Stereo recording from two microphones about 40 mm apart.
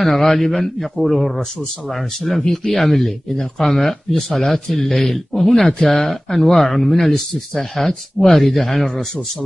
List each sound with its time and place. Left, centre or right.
0.0 s speech: centre